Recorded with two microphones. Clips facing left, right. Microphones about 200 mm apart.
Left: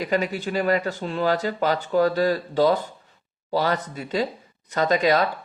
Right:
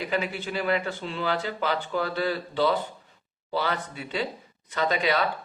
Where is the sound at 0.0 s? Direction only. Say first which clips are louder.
Left 5 dB; 40° left (ahead or behind).